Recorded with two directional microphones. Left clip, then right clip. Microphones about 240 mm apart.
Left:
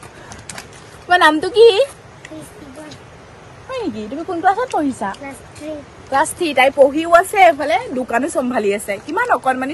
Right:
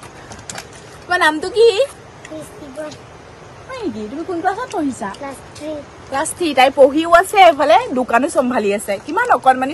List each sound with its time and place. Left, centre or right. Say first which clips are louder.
1.0 s a woman's voice: left 3 dB; centre
4.3 s speech: left 4 dB; centre
6.3 s a woman's voice: right 4 dB; centre
8.1 s speech: right 3 dB; centre